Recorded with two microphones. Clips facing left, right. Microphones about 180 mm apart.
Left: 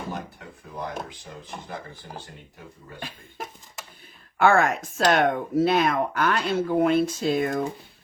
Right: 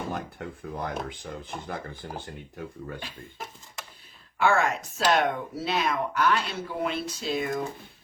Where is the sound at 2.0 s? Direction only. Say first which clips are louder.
Right 3 dB; 50° right (ahead or behind).